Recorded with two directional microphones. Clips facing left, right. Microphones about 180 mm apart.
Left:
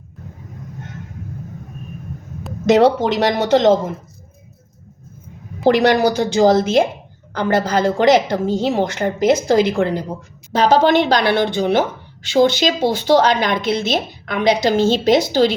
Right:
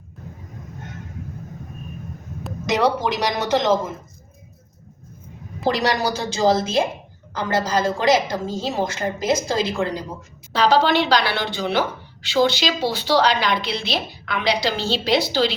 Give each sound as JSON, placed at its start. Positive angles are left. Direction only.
{"t": 2.6, "sound": "speech", "side_deg": 55}
{"t": 5.8, "sound": "a woman's voice", "side_deg": 60}